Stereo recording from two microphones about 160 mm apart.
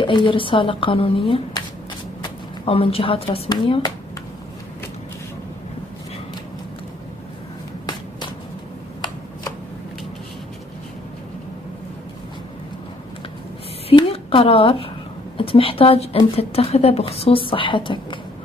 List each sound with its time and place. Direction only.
0.0 s speech: 30° left (ahead or behind)
13.8 s a sound: 35° left (ahead or behind)
15.3 s speech: 35° left (ahead or behind)